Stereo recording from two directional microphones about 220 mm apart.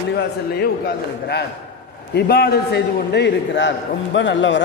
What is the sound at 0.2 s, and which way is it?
A man's voice, 50° left (ahead or behind).